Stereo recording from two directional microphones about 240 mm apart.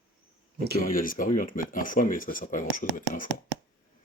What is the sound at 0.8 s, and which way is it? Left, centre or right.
Speech, left.